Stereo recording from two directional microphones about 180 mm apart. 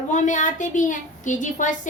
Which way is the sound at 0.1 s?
45° left (ahead or behind).